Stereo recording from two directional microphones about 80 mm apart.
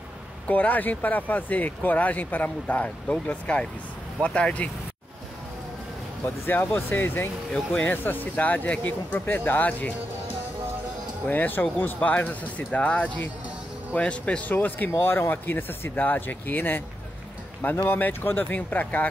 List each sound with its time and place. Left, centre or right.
0.5 s speech: left
6.2 s speech: left
7.5 s speech: centre
11.2 s speech: left